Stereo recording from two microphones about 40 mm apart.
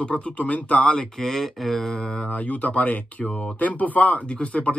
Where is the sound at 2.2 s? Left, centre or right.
Left.